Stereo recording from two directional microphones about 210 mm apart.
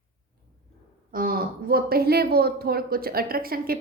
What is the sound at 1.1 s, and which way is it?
A woman's voice, 45° right (ahead or behind).